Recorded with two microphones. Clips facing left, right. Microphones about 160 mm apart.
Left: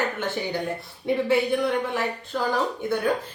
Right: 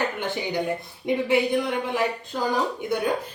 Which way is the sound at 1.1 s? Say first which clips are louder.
Even; 15° right (ahead or behind).